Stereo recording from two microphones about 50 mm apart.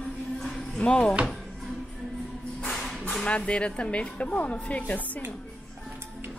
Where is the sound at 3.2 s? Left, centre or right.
Left.